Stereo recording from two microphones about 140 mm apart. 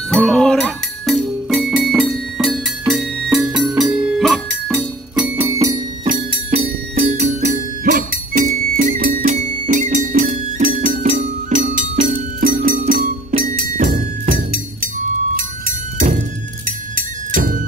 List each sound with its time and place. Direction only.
0.1 s music: 5° left (ahead or behind); by 5.6 s 15° right (ahead or behind)
6.6 s music: 55° right (ahead or behind)